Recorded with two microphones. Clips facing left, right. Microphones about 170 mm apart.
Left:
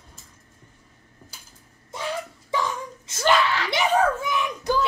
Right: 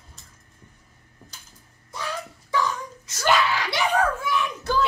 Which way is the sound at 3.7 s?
20° left (ahead or behind).